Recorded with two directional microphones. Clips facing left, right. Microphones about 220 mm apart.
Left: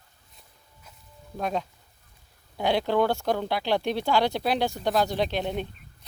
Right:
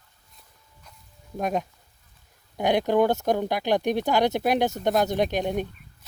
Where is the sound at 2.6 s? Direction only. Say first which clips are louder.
Right 3 dB; 15° right (ahead or behind).